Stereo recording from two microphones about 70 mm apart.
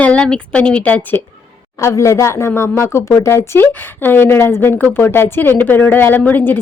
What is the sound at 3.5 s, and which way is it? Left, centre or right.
A woman's voice, left.